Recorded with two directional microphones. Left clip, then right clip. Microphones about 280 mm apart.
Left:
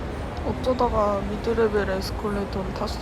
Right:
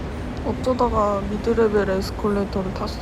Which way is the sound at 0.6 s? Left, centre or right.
Centre.